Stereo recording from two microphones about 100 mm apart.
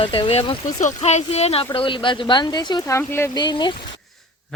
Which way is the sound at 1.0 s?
85° left.